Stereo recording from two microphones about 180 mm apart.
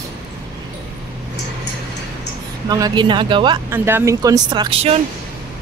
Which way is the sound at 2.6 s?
20° right (ahead or behind).